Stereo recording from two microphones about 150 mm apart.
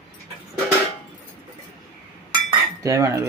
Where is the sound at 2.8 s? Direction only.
20° right (ahead or behind).